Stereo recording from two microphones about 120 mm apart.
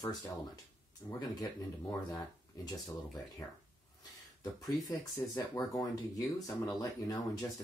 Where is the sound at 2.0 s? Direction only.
35° left (ahead or behind).